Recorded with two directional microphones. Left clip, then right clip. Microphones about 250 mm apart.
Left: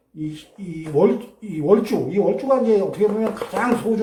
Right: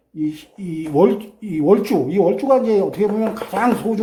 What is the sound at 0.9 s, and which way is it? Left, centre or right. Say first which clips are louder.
Speech: right 2 dB; right.